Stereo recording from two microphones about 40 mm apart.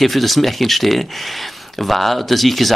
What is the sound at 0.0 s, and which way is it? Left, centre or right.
Speech, centre.